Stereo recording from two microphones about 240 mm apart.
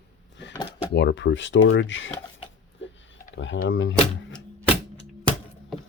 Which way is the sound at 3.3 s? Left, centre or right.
Left.